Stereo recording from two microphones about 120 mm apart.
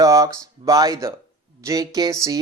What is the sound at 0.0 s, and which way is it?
Speech, 25° right (ahead or behind).